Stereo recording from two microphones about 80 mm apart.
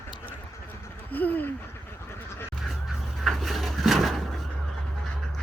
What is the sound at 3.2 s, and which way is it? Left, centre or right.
Drawer open or close, centre.